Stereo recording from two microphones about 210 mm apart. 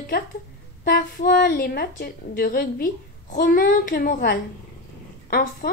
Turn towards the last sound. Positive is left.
turn(degrees=45)  # may be behind; listen again after turning